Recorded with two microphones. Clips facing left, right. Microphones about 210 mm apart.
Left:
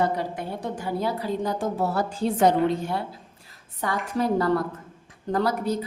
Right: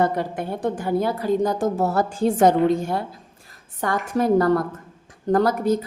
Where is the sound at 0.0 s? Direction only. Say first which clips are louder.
Right 3 dB; 50° right (ahead or behind).